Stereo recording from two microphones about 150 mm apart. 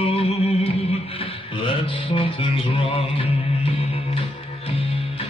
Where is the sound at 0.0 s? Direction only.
40° left (ahead or behind).